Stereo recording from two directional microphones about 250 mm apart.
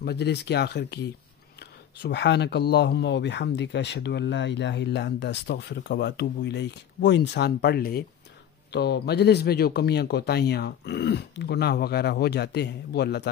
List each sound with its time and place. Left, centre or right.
0.0 s speech: left